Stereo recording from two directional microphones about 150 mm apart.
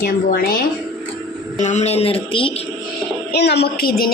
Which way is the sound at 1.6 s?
50° left (ahead or behind).